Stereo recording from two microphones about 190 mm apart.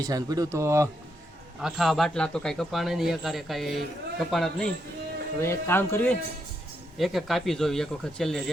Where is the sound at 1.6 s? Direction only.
Centre (ahead or behind).